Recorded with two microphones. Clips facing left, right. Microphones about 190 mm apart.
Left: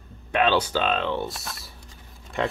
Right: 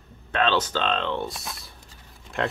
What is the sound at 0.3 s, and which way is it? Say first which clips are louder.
Speech: left 2 dB; 10° left (ahead or behind).